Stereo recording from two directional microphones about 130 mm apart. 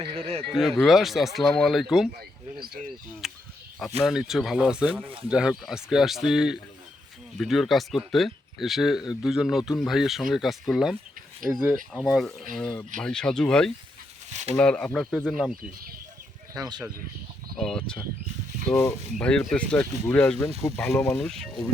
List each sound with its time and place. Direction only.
0.0 s speech: 45° right (ahead or behind)
0.5 s speech: centre (ahead or behind)
3.2 s speech: 5° right (ahead or behind)
16.6 s speech: 30° right (ahead or behind)
17.6 s speech: 5° left (ahead or behind)